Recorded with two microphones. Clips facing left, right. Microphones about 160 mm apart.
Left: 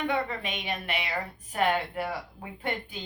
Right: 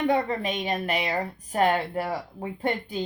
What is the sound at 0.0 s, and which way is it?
Speech, 40° right (ahead or behind).